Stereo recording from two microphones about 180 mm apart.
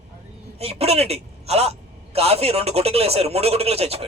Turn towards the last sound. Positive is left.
turn(degrees=-35)  # may be behind; listen again after turning